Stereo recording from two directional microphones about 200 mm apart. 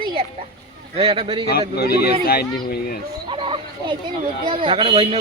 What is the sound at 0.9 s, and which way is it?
Speech, 30° right (ahead or behind).